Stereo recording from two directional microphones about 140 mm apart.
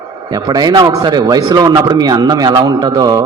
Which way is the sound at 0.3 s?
30° right (ahead or behind).